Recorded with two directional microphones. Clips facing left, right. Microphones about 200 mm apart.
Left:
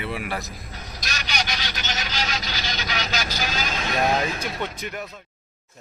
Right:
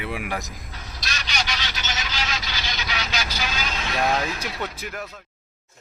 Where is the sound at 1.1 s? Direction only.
40° left (ahead or behind).